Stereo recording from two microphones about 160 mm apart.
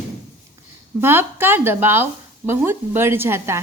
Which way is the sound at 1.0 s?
15° right (ahead or behind).